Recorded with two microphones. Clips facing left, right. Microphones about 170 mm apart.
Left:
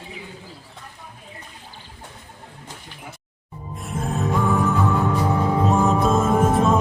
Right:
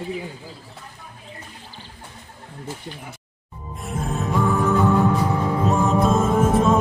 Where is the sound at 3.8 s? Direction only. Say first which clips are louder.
Left 1 dB; centre (ahead or behind).